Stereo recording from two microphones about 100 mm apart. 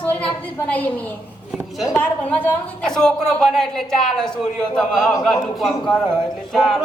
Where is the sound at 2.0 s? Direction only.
15° left (ahead or behind).